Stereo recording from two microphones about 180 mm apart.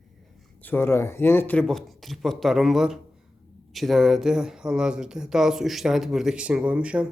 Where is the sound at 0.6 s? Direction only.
10° left (ahead or behind); by 7.1 s 5° right (ahead or behind).